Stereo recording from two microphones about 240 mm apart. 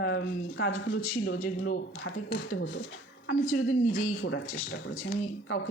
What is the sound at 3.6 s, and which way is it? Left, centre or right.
Speech, left.